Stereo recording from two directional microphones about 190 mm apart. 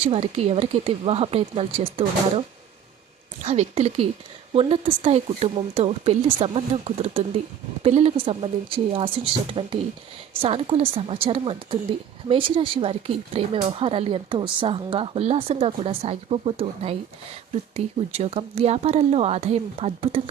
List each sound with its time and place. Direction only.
0.0 s speech: 30° right (ahead or behind)
3.4 s speech: 35° right (ahead or behind)